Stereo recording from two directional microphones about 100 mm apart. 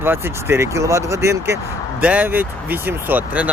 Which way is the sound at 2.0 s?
15° right (ahead or behind).